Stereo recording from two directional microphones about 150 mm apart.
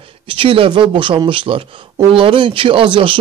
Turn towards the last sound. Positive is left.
turn(degrees=-35)  # may be behind; listen again after turning